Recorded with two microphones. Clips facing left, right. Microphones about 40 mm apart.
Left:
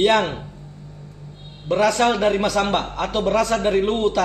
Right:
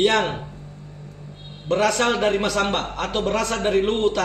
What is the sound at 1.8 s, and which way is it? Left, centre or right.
A man's voice, right.